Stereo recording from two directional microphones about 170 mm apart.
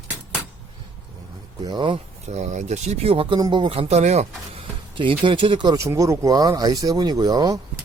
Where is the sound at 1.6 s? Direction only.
25° right (ahead or behind).